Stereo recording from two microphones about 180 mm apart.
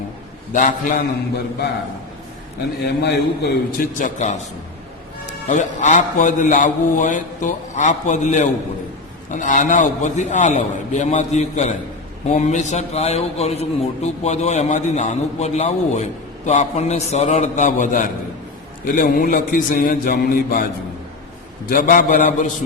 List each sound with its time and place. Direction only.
0.5 s a man's voice: 45° left (ahead or behind)
2.8 s a man's voice: 60° left (ahead or behind); by 4.4 s 45° left (ahead or behind)
5.5 s a man's voice: 40° left (ahead or behind)
21.7 s a man's voice: 50° left (ahead or behind)